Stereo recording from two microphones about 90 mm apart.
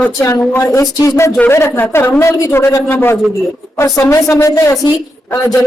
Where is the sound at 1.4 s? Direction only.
25° left (ahead or behind).